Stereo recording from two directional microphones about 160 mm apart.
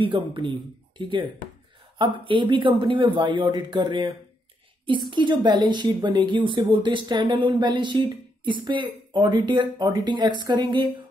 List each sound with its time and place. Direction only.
0.0 s speech: 30° right (ahead or behind)
5.1 s speech: 30° right (ahead or behind)